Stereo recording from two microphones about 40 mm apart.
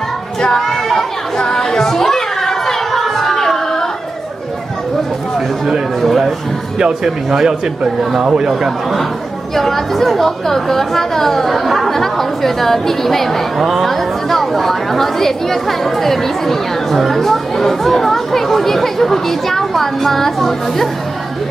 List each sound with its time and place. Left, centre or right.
0.6 s chatter: centre
5.9 s a woman's voice: centre
6.8 s speech: centre
9.6 s a woman's voice: centre
13.6 s a woman's voice: centre